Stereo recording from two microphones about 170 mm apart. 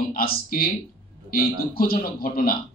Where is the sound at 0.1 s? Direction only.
60° left (ahead or behind).